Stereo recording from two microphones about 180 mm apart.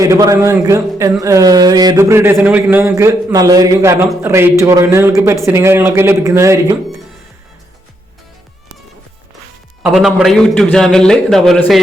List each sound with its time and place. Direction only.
0.0 s a man's voice: 20° right (ahead or behind)
9.8 s a man's voice: 5° right (ahead or behind)